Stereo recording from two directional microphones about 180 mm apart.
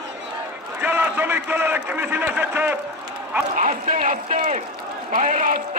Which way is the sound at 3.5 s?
45° right (ahead or behind).